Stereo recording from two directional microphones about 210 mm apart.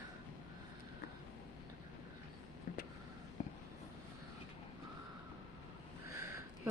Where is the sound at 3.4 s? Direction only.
35° left (ahead or behind).